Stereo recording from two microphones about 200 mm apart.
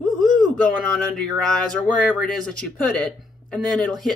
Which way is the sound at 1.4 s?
5° left (ahead or behind).